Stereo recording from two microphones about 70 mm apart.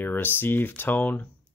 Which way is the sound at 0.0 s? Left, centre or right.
Left.